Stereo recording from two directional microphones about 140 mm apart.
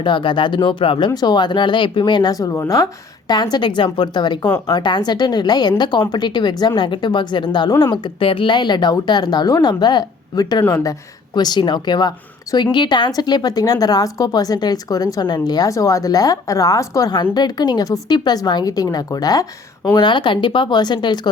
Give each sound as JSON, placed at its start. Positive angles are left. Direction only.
{"t": 0.0, "sound": "speech", "side_deg": 35}
{"t": 4.4, "sound": "speech", "side_deg": 15}
{"t": 4.7, "sound": "speech", "side_deg": 30}
{"t": 8.0, "sound": "a woman's voice", "side_deg": 40}